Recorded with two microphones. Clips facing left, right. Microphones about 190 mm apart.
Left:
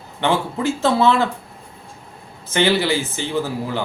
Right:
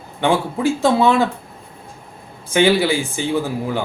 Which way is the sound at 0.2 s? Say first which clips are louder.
Right 2 dB; 15° right (ahead or behind).